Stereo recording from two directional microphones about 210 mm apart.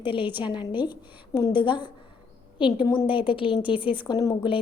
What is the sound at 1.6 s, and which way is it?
A woman's voice, 20° left (ahead or behind).